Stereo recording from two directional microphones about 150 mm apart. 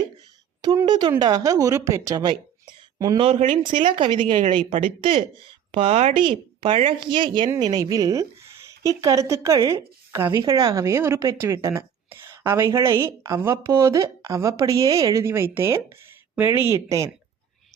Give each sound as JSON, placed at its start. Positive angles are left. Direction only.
{"t": 0.9, "sound": "a woman's voice", "side_deg": -35}
{"t": 3.2, "sound": "a woman's voice", "side_deg": -40}
{"t": 4.4, "sound": "speech", "side_deg": -50}
{"t": 4.9, "sound": "a woman's voice", "side_deg": -35}